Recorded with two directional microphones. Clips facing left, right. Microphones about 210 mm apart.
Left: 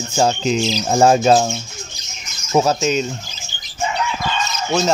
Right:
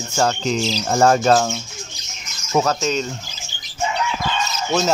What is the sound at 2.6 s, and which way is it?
Speech, 30° left (ahead or behind).